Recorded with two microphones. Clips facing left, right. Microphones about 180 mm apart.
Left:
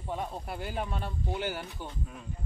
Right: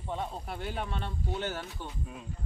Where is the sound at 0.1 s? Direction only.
5° left (ahead or behind).